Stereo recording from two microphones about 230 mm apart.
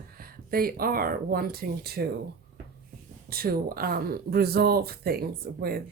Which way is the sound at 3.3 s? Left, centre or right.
Right.